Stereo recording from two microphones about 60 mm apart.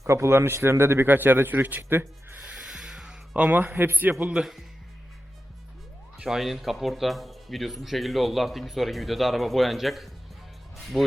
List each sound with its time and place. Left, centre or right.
0.0 s a man's voice: right
2.6 s music: centre
3.3 s a man's voice: right
6.2 s speech: centre